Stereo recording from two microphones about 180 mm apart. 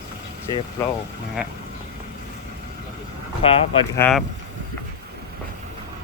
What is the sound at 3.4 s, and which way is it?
Speech, 30° left (ahead or behind).